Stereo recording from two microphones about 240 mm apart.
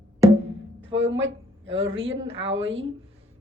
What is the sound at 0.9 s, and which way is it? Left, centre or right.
A woman's voice, right.